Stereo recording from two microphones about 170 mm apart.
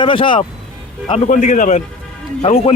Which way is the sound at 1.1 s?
45° left (ahead or behind).